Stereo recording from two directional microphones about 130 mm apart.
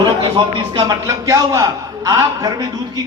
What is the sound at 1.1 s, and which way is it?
A man's voice, 25° right (ahead or behind).